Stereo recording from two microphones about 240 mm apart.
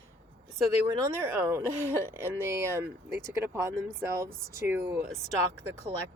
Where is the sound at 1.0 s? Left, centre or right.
Centre.